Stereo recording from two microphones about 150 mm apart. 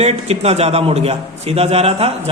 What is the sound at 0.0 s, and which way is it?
A man's voice, 45° right (ahead or behind).